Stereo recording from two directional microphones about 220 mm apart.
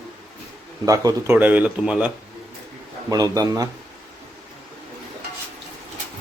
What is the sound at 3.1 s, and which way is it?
Speech, 15° right (ahead or behind).